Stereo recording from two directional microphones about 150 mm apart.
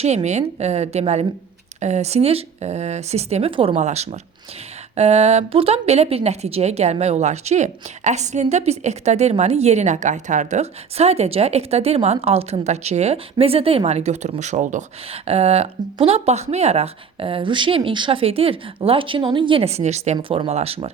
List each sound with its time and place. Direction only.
0.0 s speech: 45° right (ahead or behind)
3.8 s speech: 50° right (ahead or behind)
15.1 s speech: 45° right (ahead or behind)
20.1 s speech: 35° right (ahead or behind)